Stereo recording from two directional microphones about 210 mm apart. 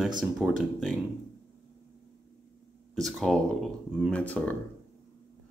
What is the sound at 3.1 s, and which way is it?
Speech, centre (ahead or behind).